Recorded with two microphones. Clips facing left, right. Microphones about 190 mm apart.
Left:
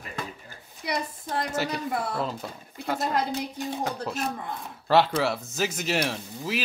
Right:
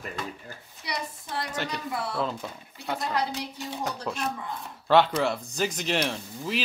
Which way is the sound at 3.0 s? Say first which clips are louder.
Left 2 dB; 50° left (ahead or behind).